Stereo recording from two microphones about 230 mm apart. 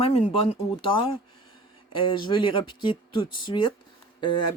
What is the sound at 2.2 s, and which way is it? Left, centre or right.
Speech, left.